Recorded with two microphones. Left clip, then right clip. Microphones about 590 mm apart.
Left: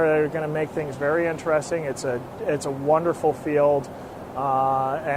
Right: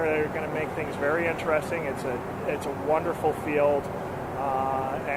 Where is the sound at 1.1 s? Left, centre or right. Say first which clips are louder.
Left 3 dB; left.